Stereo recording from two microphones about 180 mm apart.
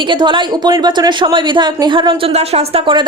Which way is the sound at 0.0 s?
25° right (ahead or behind).